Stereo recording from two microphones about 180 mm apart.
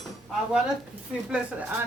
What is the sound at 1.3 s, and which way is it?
Speech, 10° right (ahead or behind).